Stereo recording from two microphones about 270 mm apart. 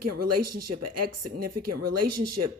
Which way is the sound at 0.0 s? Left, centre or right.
Right.